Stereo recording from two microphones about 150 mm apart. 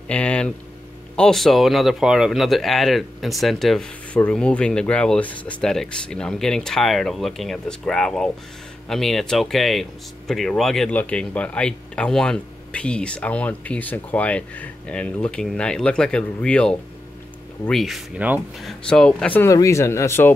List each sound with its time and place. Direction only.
0.1 s speech: 10° left (ahead or behind); by 18.7 s 10° right (ahead or behind)
18.7 s speech: 5° left (ahead or behind)
19.5 s speech: 20° left (ahead or behind)